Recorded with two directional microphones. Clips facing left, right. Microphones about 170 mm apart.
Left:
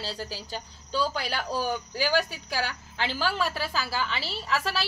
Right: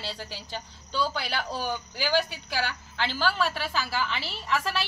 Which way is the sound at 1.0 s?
40° left (ahead or behind).